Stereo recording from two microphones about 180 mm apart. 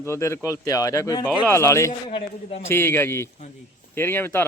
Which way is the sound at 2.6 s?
15° left (ahead or behind).